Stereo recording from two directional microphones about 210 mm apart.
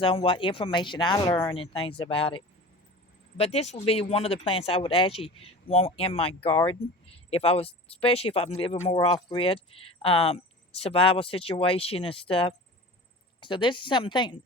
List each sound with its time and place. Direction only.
0.0 s speech: 25° left (ahead or behind)